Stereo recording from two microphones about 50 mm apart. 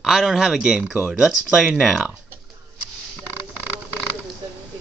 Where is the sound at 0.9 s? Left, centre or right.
Right.